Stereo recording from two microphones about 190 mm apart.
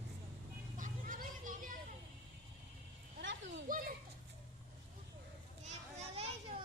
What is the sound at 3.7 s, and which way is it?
Children playing, 45° right (ahead or behind).